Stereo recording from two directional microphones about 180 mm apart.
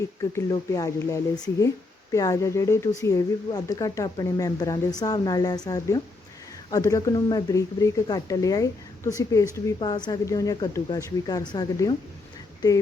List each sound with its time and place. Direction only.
0.2 s speech: 20° left (ahead or behind)